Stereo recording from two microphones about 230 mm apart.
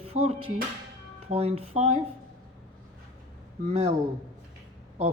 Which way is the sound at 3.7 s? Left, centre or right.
Right.